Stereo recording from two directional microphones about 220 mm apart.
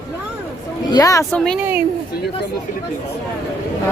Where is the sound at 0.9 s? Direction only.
15° left (ahead or behind).